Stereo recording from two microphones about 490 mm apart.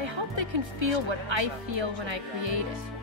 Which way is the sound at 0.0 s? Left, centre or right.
Right.